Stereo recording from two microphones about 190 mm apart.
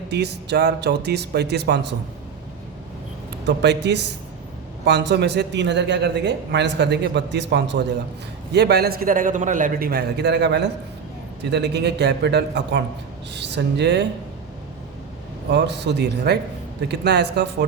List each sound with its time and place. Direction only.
0.1 s a man's voice: 60° right (ahead or behind)
3.4 s a man's voice: 65° right (ahead or behind)
15.5 s a man's voice: 65° right (ahead or behind)